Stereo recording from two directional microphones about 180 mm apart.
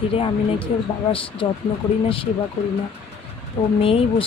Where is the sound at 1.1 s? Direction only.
30° left (ahead or behind).